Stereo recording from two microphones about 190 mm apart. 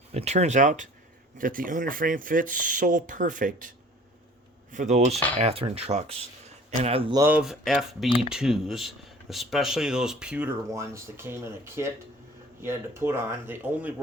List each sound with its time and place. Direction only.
0.1 s speech: 35° right (ahead or behind)
4.7 s speech: 40° right (ahead or behind)
7.2 s speech: 10° right (ahead or behind)